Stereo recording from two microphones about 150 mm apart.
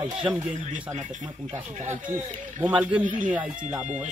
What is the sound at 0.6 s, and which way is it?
Speech, 50° right (ahead or behind).